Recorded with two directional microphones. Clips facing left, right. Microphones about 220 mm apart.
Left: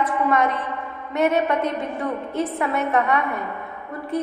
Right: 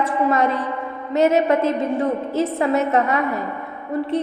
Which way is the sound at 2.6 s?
25° right (ahead or behind).